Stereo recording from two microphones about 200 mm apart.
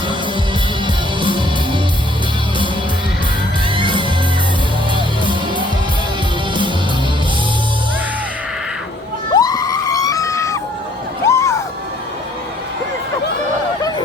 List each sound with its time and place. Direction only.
1.2 s music: 25° right (ahead or behind)
3.8 s music: 25° right (ahead or behind)
9.3 s screaming: 20° left (ahead or behind)
11.3 s a sound: 15° left (ahead or behind)